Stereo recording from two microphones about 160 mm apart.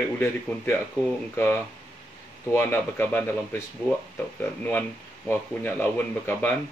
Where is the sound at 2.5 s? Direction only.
15° left (ahead or behind).